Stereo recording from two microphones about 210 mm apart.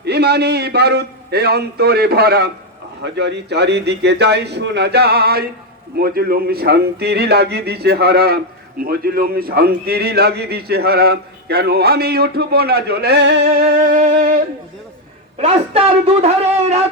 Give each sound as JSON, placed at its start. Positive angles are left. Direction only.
{"t": 0.0, "sound": "a man's voice", "side_deg": -50}
{"t": 13.7, "sound": "speech", "side_deg": -40}
{"t": 15.4, "sound": "speech", "side_deg": -30}